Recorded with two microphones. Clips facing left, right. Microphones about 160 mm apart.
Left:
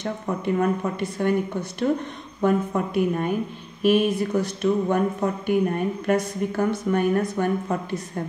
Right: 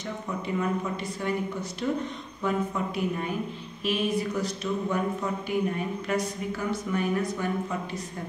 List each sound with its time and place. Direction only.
0.6 s speech: 55° left (ahead or behind)